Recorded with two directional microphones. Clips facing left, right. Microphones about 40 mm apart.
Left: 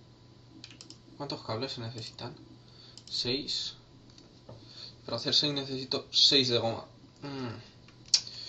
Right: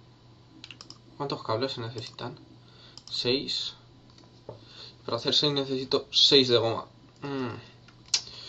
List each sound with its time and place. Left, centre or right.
0.6 s computer keyboard: right
2.8 s clicking: right
4.6 s speech: right